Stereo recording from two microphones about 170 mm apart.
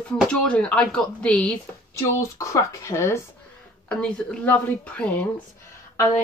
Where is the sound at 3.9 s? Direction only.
5° left (ahead or behind).